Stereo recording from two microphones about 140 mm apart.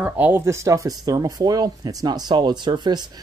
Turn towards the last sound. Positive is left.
turn(degrees=-30)  # may be behind; listen again after turning